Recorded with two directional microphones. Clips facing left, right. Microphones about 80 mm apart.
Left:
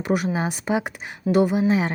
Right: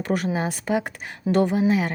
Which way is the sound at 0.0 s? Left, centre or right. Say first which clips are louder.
Left 1 dB; centre.